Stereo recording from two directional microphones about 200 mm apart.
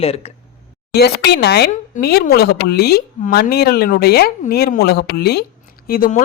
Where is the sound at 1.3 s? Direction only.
55° left (ahead or behind).